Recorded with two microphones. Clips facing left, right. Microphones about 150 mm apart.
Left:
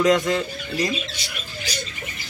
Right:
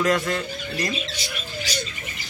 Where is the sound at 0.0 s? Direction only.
15° left (ahead or behind).